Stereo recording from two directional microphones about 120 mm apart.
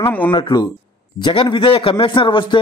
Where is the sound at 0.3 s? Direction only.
45° left (ahead or behind).